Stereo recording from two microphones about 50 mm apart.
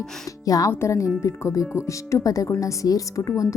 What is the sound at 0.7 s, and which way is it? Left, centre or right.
Speech, left.